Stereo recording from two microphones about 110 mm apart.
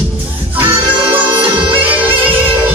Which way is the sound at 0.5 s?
15° right (ahead or behind).